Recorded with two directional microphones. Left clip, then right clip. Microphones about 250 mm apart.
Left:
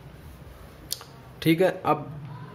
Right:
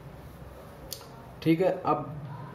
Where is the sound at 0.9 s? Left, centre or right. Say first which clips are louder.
Left 8 dB; left.